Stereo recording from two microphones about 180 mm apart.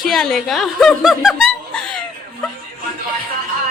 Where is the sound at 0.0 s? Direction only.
Centre (ahead or behind).